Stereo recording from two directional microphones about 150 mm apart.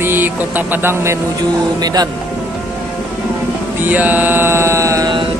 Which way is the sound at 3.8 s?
10° right (ahead or behind).